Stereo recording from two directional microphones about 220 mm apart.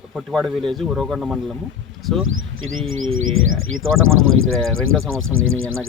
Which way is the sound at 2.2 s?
65° right (ahead or behind).